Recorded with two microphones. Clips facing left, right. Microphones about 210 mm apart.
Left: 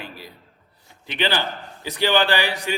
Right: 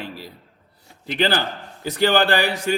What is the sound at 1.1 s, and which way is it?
A man's voice, 40° right (ahead or behind).